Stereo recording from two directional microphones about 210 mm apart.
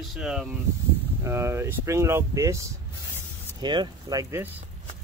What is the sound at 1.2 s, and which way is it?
Speech, 15° right (ahead or behind).